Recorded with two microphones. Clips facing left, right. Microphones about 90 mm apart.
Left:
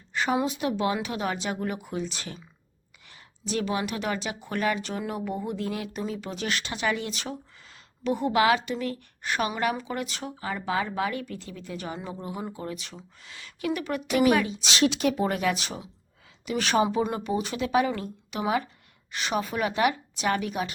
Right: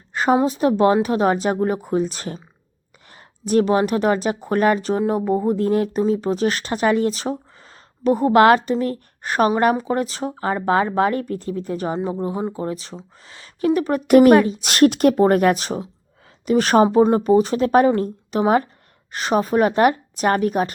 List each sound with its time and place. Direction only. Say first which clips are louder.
0.1 s speech: right 8 dB; 40° right (ahead or behind)
8.6 s speech: right 9 dB; 40° right (ahead or behind)
14.1 s speech: right 11 dB; 50° right (ahead or behind)